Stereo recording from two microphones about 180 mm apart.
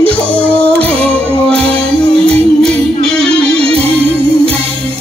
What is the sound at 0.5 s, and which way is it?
Music, 5° left (ahead or behind).